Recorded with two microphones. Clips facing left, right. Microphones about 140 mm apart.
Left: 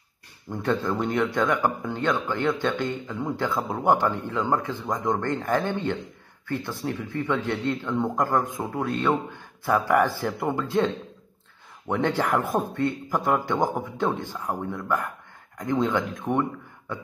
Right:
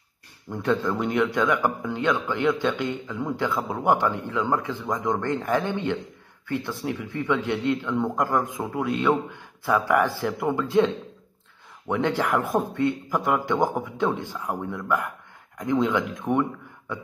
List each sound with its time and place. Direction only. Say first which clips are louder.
0.5 s a man's voice: right 1 dB; centre (ahead or behind)